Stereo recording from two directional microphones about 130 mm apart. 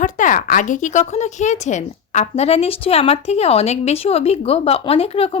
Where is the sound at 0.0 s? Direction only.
80° left.